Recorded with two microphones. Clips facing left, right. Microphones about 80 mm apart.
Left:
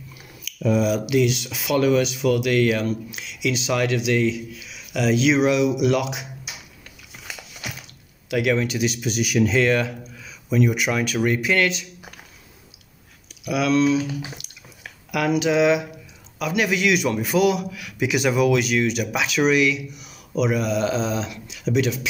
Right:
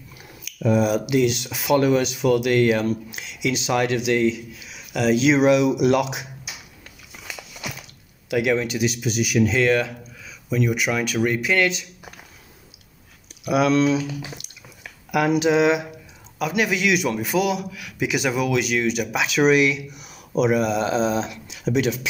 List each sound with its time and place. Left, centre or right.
0.6 s speech: right
8.3 s speech: centre
13.5 s speech: right
14.4 s a sound: left
15.0 s speech: centre
19.5 s speech: right